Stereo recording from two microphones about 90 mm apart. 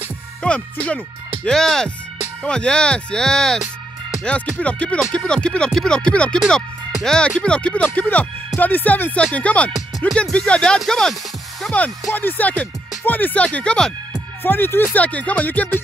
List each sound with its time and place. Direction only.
0.8 s speech: 10° left (ahead or behind)
9.8 s music: centre (ahead or behind)
10.3 s speech: 10° left (ahead or behind)
12.1 s speech: 20° left (ahead or behind)
14.4 s speech: 25° left (ahead or behind)